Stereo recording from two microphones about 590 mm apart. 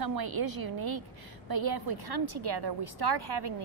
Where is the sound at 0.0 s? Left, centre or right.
Right.